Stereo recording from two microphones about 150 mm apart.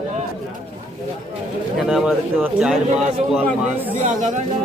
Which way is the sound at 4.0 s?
60° right (ahead or behind).